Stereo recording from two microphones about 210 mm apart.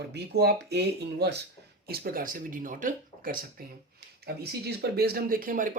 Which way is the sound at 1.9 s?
45° right (ahead or behind).